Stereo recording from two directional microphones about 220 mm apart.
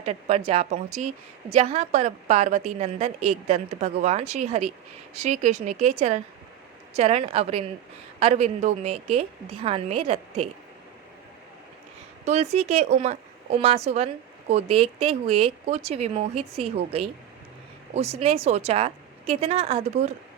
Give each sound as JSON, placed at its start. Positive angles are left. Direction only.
{"t": 0.0, "sound": "a woman's voice", "side_deg": -30}
{"t": 12.2, "sound": "a woman's voice", "side_deg": -30}